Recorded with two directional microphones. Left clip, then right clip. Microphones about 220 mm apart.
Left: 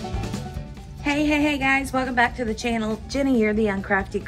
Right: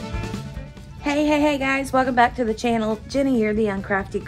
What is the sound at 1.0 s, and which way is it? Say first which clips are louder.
A woman's voice: right 2 dB; 10° right (ahead or behind).